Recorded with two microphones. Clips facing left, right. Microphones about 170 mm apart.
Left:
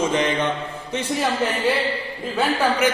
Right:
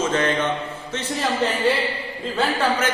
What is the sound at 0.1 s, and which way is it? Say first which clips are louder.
Mantra: even; 15° left (ahead or behind).